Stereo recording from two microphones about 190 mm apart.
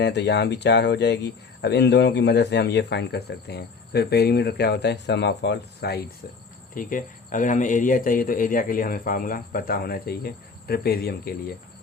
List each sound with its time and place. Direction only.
0.0 s speech: 65° left (ahead or behind)
6.7 s speech: 45° left (ahead or behind)